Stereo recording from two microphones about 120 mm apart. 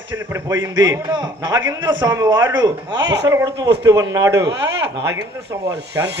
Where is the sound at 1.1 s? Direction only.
35° right (ahead or behind).